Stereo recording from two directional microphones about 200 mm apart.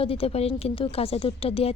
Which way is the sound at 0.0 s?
30° left (ahead or behind).